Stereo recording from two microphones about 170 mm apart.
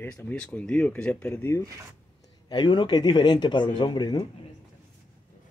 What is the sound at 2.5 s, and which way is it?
Speech, 25° left (ahead or behind).